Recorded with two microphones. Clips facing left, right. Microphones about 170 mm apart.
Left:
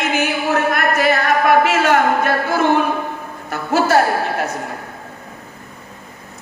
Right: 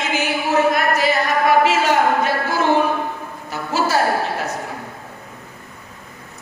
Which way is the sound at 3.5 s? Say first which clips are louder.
Left 4 dB; 55° left (ahead or behind).